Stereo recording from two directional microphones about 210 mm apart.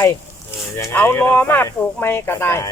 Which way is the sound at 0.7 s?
10° left (ahead or behind).